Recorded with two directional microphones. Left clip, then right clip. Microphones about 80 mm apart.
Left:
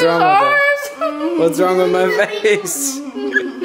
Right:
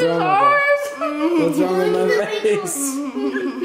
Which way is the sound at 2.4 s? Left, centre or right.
Centre.